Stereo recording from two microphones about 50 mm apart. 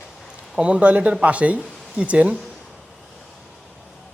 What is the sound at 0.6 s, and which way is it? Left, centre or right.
Speech, right.